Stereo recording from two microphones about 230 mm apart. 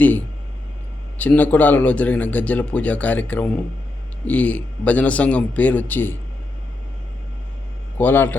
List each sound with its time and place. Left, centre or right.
1.2 s a man's voice: centre
7.9 s a man's voice: centre